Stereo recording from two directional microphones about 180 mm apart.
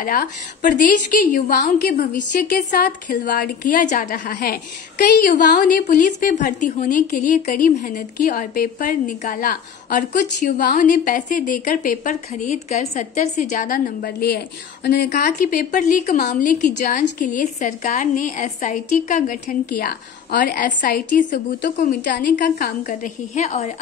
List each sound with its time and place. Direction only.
0.0 s a woman's voice: 50° left (ahead or behind)